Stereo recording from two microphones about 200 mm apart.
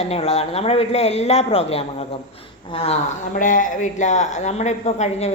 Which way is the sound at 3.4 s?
40° left (ahead or behind).